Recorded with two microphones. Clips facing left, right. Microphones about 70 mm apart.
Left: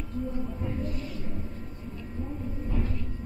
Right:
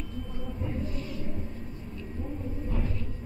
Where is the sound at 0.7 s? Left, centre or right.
Centre.